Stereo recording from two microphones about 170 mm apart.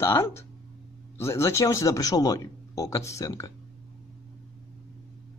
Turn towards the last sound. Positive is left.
turn(degrees=20)  # may be behind; listen again after turning